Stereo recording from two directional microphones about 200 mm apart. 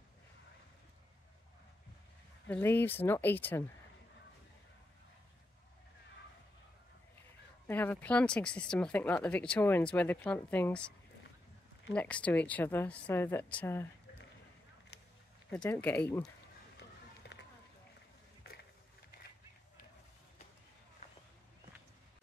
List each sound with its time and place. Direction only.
2.4 s speech: 10° left (ahead or behind)
7.6 s speech: 10° left (ahead or behind)
11.9 s speech: 5° left (ahead or behind)
14.9 s a sound: 55° left (ahead or behind)
15.5 s speech: 5° left (ahead or behind)